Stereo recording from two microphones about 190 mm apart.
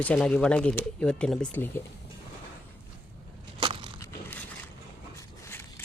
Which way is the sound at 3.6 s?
25° right (ahead or behind).